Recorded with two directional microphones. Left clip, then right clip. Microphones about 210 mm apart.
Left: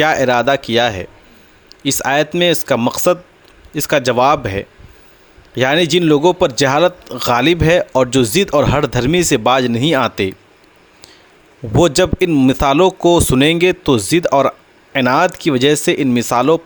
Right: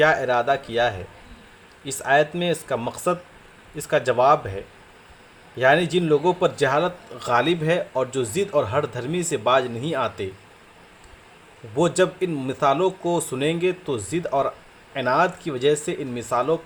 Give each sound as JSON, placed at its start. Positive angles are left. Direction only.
{"t": 0.0, "sound": "speech", "side_deg": 50}
{"t": 11.8, "sound": "speech", "side_deg": 50}